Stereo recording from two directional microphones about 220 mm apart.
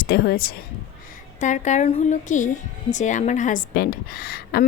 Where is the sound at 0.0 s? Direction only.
45° left (ahead or behind).